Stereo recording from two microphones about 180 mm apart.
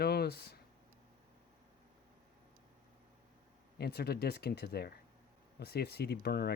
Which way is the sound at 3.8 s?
65° left (ahead or behind).